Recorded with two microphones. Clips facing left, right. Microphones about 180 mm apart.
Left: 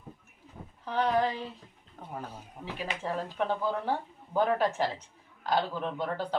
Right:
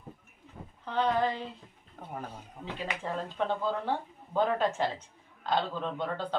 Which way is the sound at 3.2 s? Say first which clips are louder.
Even; 10° left (ahead or behind).